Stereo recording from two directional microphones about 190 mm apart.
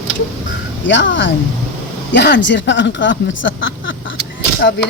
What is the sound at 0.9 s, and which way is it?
Speech, 75° left (ahead or behind).